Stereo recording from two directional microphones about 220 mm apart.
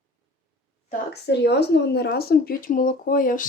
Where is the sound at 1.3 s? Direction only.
50° left (ahead or behind).